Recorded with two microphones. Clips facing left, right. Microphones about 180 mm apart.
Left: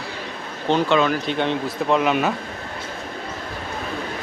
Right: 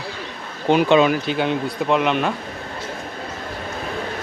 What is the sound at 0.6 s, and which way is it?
Speech, 15° right (ahead or behind).